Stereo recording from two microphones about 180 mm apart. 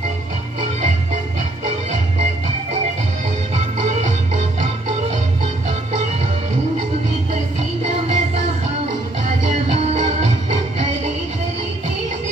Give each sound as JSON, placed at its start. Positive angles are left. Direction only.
{"t": 4.4, "sound": "music", "side_deg": -35}
{"t": 7.8, "sound": "music", "side_deg": -35}